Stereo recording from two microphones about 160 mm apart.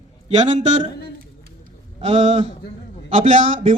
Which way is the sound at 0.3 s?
45° right (ahead or behind).